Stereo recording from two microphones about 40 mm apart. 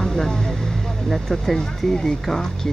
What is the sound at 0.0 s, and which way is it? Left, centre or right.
Vehicle, centre.